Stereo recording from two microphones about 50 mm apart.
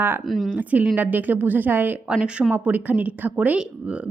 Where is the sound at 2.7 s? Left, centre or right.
Right.